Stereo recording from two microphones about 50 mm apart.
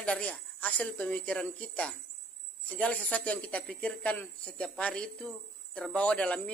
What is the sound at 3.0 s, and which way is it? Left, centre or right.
Speech, left.